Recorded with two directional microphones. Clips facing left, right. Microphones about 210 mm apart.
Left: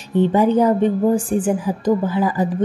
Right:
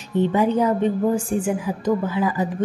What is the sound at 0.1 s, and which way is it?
Speech, 30° left (ahead or behind).